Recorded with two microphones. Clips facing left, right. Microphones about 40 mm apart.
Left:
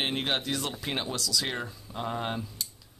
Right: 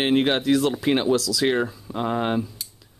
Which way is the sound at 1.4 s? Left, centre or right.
Right.